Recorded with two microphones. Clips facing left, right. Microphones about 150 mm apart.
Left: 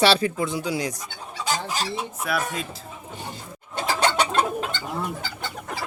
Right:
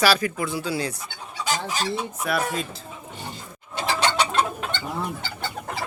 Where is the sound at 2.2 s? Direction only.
Centre (ahead or behind).